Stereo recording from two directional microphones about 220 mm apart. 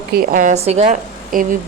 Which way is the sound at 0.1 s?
40° right (ahead or behind).